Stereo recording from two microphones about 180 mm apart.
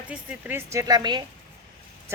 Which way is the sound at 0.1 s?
10° right (ahead or behind).